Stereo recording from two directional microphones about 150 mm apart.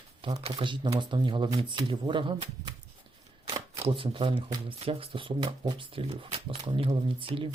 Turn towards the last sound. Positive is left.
turn(degrees=-35)  # may be behind; listen again after turning